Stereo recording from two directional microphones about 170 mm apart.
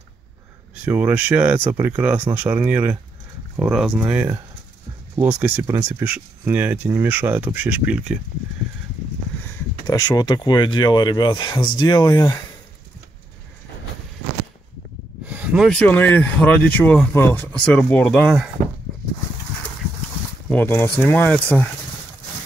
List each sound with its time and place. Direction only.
0.8 s speech: 10° right (ahead or behind)
9.8 s speech: 25° left (ahead or behind)
15.2 s a sound: 10° right (ahead or behind)
15.7 s speech: 10° left (ahead or behind)
20.4 s speech: 10° left (ahead or behind)